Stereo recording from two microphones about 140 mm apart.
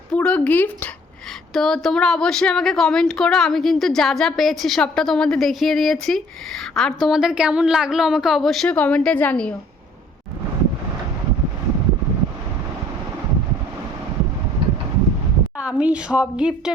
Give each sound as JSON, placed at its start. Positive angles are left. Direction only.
{"t": 0.1, "sound": "speech", "side_deg": 10}
{"t": 14.6, "sound": "a sound", "side_deg": -45}
{"t": 15.6, "sound": "a woman's voice", "side_deg": -10}